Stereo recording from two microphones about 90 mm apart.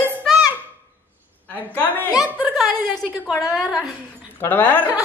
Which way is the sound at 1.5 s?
20° left (ahead or behind).